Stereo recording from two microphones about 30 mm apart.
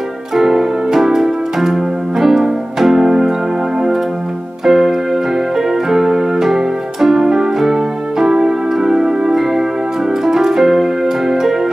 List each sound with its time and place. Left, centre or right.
0.3 s keyboard: centre
3.1 s music: right
4.6 s keyboard: centre
9.3 s music: centre
10.2 s keyboard: centre